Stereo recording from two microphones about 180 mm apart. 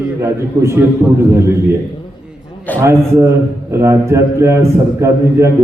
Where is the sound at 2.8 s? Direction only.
15° right (ahead or behind).